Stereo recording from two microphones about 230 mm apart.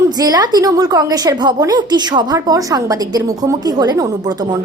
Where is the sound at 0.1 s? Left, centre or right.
Centre.